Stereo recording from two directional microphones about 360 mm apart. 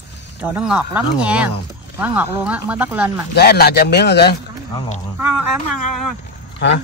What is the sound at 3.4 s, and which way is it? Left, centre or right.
Speech, left.